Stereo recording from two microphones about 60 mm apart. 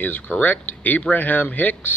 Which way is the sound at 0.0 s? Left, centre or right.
Left.